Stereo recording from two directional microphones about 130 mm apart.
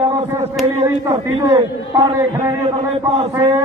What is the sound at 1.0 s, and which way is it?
A man's voice, 25° right (ahead or behind).